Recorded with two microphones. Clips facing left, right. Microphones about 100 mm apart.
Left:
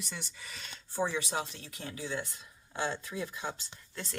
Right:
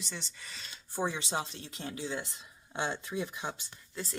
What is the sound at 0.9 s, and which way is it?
Speech, 15° right (ahead or behind).